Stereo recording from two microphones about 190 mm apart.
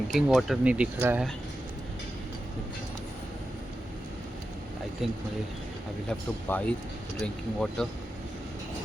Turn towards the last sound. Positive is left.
turn(degrees=5)  # may be behind; listen again after turning